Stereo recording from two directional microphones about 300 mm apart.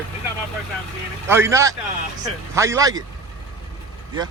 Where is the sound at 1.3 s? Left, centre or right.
Centre.